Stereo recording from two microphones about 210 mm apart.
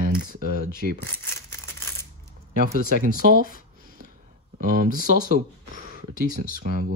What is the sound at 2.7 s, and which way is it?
Speech, 40° right (ahead or behind).